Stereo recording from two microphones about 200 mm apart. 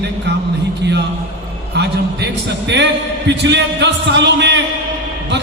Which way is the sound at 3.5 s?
60° right (ahead or behind).